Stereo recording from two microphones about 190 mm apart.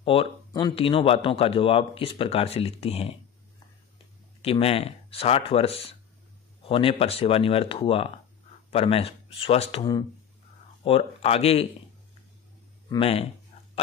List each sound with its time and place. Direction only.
0.0 s speech: 30° left (ahead or behind)
4.4 s speech: 30° left (ahead or behind)
12.9 s speech: 30° left (ahead or behind)